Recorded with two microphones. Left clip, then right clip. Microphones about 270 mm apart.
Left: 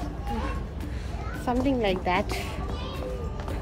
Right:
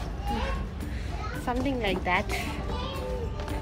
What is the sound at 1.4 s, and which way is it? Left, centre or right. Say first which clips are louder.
Speech: left 4 dB; centre.